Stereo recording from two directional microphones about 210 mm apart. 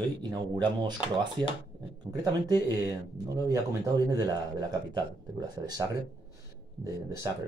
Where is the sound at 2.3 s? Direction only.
20° right (ahead or behind).